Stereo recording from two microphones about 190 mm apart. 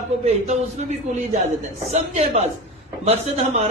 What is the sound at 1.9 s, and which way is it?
Speech, 35° right (ahead or behind).